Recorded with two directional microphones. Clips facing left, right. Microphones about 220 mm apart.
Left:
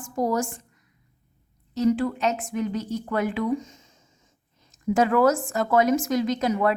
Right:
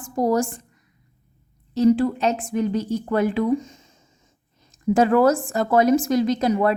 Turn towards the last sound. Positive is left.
turn(degrees=-35)  # may be behind; listen again after turning